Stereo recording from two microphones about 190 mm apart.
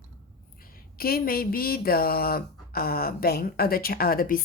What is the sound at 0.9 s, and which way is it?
Speech, 50° left (ahead or behind).